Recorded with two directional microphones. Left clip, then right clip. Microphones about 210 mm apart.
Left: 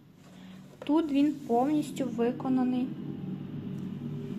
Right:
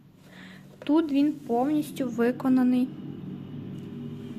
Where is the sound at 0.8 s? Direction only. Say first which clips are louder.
Right 3 dB; 15° right (ahead or behind).